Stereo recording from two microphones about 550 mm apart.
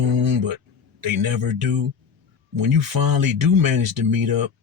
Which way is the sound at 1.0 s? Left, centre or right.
Right.